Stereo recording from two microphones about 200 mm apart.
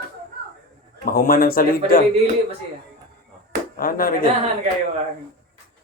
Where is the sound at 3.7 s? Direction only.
45° left (ahead or behind).